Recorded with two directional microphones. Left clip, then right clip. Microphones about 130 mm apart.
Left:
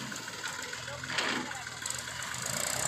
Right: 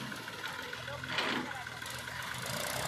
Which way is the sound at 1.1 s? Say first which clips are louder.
Left 2 dB; centre (ahead or behind).